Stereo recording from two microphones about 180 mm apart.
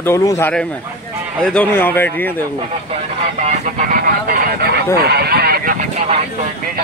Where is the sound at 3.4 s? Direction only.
45° right (ahead or behind).